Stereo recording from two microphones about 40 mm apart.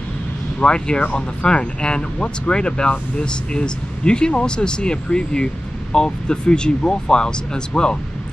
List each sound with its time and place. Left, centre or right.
0.6 s speech: left